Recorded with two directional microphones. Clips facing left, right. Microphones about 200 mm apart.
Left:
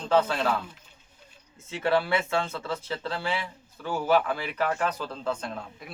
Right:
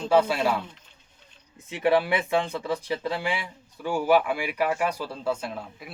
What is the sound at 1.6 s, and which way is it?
Speech, 15° right (ahead or behind).